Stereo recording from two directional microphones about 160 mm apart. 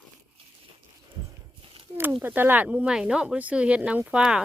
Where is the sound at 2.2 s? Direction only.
10° right (ahead or behind).